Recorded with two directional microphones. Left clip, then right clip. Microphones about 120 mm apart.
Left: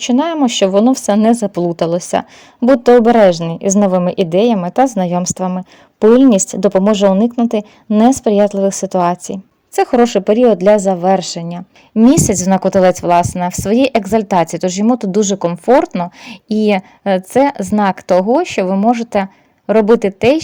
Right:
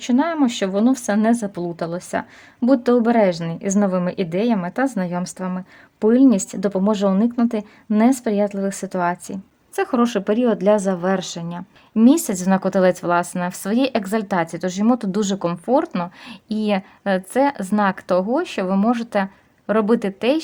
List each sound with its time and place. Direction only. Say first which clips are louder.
0.0 s a woman's voice: left 5 dB; 40° left (ahead or behind)
1.6 s a woman's voice: left 11 dB; 50° left (ahead or behind)
2.8 s a woman's voice: left 10 dB; 35° left (ahead or behind)
14.3 s a woman's voice: left 8 dB; 40° left (ahead or behind); by 15.5 s 25° left (ahead or behind)
15.6 s a woman's voice: left 9 dB; 40° left (ahead or behind)